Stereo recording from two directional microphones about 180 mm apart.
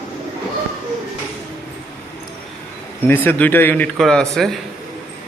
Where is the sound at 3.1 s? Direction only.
10° left (ahead or behind).